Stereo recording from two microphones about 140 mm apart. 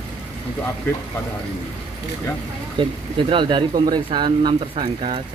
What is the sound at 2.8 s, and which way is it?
Speech, 35° right (ahead or behind).